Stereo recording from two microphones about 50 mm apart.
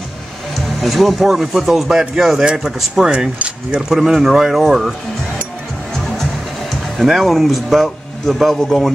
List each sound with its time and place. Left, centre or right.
0.6 s speech: centre
3.3 s speech: right
3.9 s speech: centre
7.0 s speech: centre